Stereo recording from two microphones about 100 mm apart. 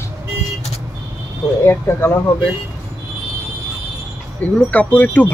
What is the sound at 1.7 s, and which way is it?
Speech, 25° left (ahead or behind).